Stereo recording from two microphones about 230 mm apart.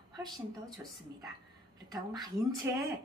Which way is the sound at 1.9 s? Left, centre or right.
Centre.